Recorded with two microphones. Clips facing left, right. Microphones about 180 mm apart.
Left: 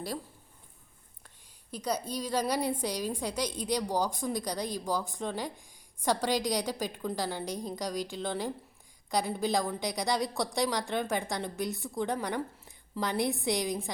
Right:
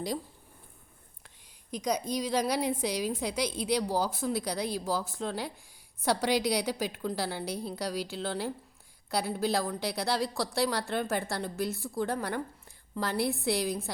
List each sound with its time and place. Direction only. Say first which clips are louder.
1.7 s a woman's voice: right 3 dB; 10° right (ahead or behind)
10.2 s a woman's voice: right 1 dB; 20° left (ahead or behind)
10.7 s a woman's voice: even; 5° right (ahead or behind)